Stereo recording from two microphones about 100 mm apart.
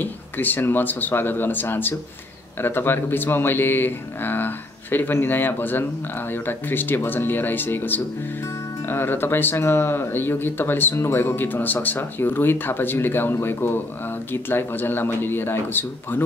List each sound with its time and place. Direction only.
0.0 s speech: 20° left (ahead or behind)